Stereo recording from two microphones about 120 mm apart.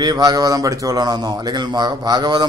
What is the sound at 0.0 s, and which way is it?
Speech, 35° right (ahead or behind).